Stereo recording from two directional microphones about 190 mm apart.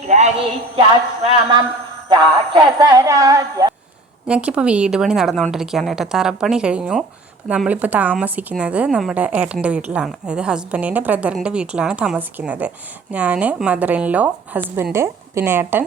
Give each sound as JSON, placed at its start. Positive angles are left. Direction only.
{"t": 0.1, "sound": "a woman's voice", "side_deg": -35}
{"t": 1.2, "sound": "a sound", "side_deg": -25}
{"t": 4.3, "sound": "a woman's voice", "side_deg": -5}